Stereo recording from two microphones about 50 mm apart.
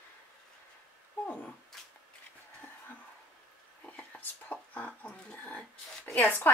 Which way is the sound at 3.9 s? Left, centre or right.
Left.